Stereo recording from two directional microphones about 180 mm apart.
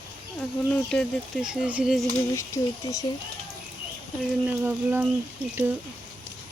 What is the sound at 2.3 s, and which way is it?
Speech, 15° left (ahead or behind).